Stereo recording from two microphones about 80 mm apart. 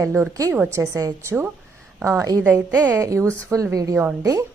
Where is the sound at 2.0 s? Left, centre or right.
Right.